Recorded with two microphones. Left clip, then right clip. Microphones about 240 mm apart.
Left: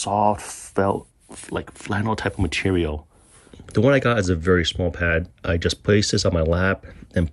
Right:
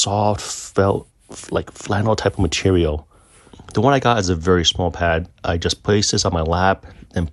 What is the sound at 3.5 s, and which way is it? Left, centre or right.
Speech, centre.